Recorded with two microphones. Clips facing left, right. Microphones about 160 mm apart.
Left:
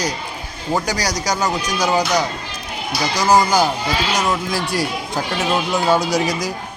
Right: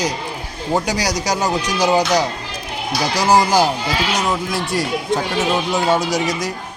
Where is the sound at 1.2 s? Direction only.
25° right (ahead or behind).